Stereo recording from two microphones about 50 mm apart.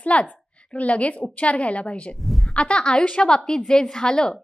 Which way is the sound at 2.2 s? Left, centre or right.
Centre.